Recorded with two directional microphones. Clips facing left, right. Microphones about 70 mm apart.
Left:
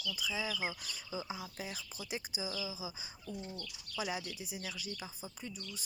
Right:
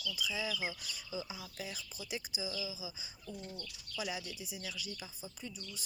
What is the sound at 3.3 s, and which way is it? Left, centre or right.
Speech, centre.